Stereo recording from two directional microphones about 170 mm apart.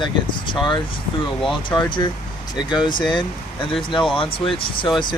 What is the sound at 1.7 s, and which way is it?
Speech, 25° left (ahead or behind).